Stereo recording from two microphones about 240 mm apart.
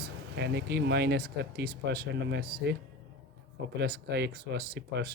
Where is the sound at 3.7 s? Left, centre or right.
Right.